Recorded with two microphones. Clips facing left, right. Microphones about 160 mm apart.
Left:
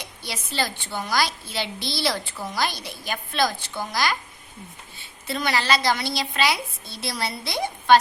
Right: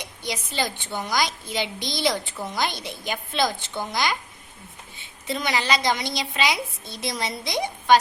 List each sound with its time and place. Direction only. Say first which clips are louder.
0.0 s a woman's voice: right 4 dB; 15° right (ahead or behind)
5.3 s a woman's voice: left 1 dB; 15° right (ahead or behind)